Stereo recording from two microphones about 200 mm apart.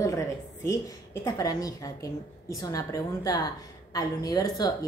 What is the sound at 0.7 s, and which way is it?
Speech, 15° left (ahead or behind).